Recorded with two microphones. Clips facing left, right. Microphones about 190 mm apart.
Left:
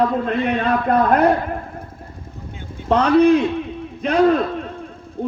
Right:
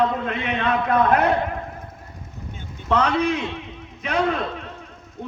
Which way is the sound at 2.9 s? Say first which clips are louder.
Left 7 dB; 35° left (ahead or behind).